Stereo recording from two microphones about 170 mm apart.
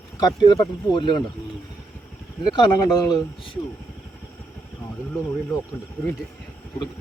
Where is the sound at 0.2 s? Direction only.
25° left (ahead or behind).